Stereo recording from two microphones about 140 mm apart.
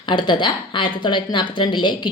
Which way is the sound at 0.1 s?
35° left (ahead or behind).